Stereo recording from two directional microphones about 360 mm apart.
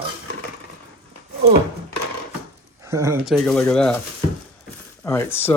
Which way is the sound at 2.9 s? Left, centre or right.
Centre.